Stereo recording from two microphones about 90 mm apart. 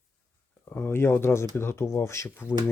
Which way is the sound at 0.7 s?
25° left (ahead or behind).